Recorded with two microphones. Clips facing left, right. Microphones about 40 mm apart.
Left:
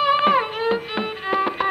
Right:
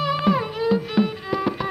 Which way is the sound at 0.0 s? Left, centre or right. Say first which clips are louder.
Left 4 dB; left.